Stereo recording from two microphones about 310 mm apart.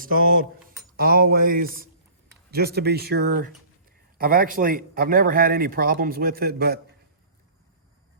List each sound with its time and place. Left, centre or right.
0.0 s speech: right